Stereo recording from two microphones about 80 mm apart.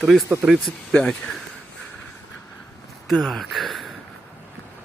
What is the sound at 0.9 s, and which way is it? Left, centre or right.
Speech, centre.